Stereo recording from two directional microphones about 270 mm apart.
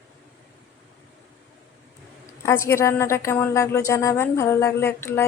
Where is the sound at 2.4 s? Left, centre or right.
Centre.